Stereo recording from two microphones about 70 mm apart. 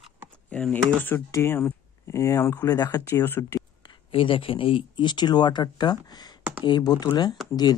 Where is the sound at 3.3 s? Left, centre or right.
Left.